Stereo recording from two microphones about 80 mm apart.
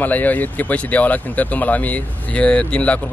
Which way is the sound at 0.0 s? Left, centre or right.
Left.